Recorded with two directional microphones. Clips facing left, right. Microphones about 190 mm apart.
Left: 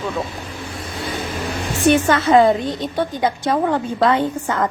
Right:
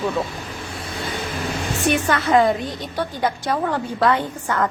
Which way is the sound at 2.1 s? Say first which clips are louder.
Left 1 dB; 25° left (ahead or behind).